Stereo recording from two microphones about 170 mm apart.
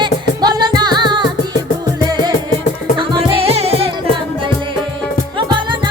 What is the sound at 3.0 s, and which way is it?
Music, 30° right (ahead or behind).